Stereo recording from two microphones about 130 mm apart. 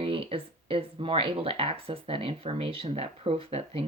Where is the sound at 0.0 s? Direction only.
45° right (ahead or behind).